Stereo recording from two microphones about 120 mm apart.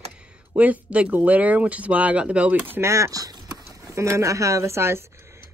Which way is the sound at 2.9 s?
30° right (ahead or behind).